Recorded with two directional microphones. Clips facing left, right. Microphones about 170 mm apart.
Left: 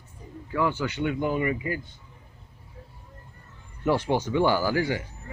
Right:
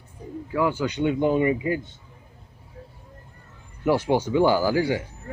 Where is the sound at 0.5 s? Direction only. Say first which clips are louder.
Right 3 dB; 10° right (ahead or behind).